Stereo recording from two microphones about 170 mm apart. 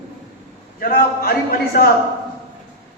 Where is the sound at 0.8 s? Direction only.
55° left (ahead or behind).